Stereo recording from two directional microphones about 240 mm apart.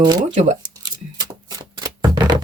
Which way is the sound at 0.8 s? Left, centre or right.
Centre.